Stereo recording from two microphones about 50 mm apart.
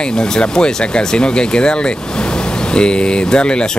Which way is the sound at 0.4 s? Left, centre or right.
Centre.